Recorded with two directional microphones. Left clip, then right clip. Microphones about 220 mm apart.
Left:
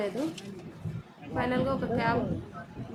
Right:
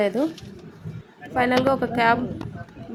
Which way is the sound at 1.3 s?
35° right (ahead or behind).